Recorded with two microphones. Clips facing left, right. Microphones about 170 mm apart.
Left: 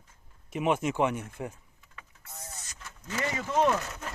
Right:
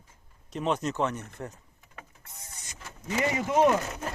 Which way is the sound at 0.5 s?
10° left (ahead or behind).